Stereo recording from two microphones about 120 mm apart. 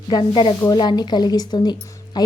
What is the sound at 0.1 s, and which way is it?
A woman's voice, 40° left (ahead or behind).